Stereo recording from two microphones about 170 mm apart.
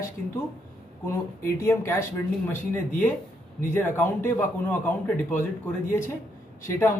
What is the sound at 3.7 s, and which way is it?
A man's voice, 10° left (ahead or behind).